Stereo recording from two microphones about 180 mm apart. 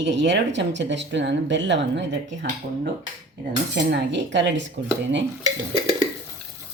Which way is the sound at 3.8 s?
75° right (ahead or behind).